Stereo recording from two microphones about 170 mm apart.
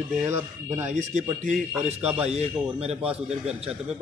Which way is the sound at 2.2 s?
40° right (ahead or behind).